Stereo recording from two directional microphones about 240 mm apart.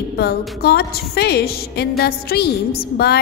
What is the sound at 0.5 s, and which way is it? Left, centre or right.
A woman's voice, left.